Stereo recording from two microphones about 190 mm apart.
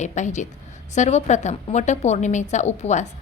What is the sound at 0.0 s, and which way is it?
A woman's voice, 40° left (ahead or behind).